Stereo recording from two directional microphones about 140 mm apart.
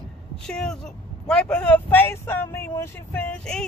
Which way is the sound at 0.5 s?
5° left (ahead or behind).